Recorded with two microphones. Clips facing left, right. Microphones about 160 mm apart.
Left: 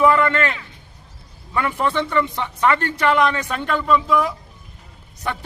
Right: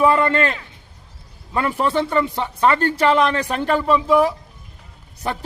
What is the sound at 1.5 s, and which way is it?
Speech, 30° right (ahead or behind).